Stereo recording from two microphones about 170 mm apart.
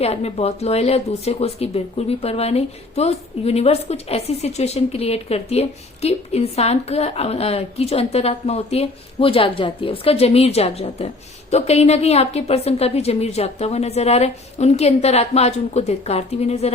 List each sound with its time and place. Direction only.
0.0 s speech: 35° left (ahead or behind)